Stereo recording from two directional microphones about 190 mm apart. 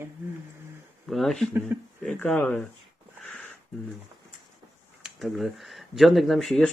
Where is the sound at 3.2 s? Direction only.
5° left (ahead or behind).